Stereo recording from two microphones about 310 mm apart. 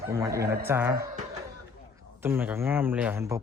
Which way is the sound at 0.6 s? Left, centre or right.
Centre.